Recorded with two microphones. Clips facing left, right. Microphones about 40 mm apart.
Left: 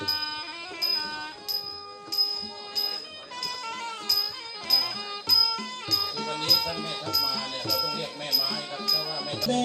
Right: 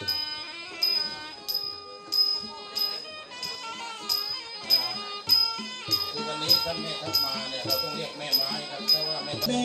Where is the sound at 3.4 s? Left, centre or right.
Left.